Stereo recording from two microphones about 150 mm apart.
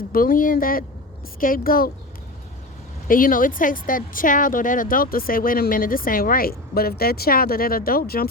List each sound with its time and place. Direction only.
0.1 s speech: 70° left (ahead or behind)
3.1 s speech: 65° left (ahead or behind); by 8.3 s 85° left